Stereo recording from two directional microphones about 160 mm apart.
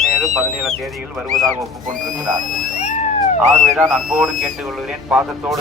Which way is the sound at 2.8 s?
45° left (ahead or behind).